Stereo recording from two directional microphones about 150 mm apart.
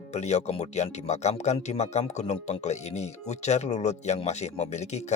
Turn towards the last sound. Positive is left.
turn(degrees=50)  # may be behind; listen again after turning